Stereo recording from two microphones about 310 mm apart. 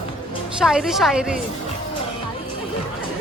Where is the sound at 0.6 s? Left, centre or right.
Centre.